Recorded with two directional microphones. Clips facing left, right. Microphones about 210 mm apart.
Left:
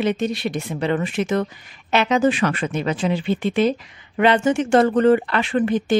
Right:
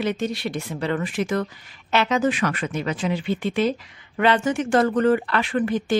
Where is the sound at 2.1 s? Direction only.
30° left (ahead or behind).